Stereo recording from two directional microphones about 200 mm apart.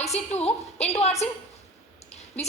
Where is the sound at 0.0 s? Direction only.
30° left (ahead or behind).